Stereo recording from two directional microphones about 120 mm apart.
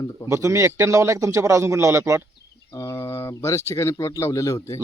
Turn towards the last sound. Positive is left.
turn(degrees=25)  # may be behind; listen again after turning